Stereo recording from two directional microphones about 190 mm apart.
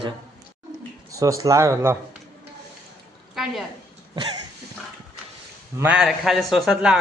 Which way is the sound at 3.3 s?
Centre (ahead or behind).